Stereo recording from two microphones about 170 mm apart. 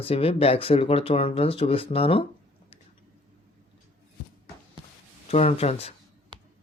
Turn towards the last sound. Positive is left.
turn(degrees=35)  # may be behind; listen again after turning